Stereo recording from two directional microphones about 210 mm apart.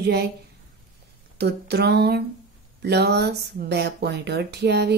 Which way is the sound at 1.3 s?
50° right (ahead or behind).